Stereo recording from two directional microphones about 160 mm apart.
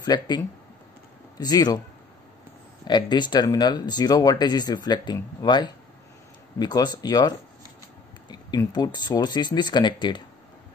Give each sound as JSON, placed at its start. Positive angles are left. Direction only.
{"t": 0.0, "sound": "speech", "side_deg": 25}
{"t": 1.4, "sound": "speech", "side_deg": 25}
{"t": 2.9, "sound": "speech", "side_deg": 25}